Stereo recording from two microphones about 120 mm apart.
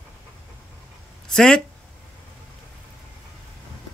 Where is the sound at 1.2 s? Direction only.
5° left (ahead or behind).